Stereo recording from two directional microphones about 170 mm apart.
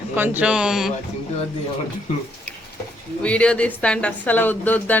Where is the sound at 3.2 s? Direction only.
5° left (ahead or behind).